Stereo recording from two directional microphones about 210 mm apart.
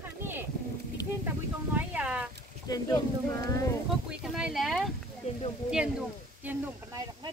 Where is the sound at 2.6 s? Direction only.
15° left (ahead or behind).